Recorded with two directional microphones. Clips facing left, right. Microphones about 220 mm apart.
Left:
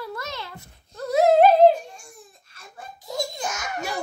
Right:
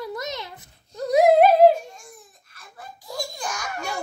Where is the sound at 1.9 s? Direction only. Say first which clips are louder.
Even; 25° left (ahead or behind).